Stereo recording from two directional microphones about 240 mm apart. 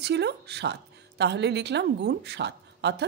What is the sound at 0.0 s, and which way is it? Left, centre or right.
Speech, right.